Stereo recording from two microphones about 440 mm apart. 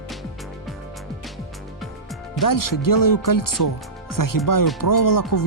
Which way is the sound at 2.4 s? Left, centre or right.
Left.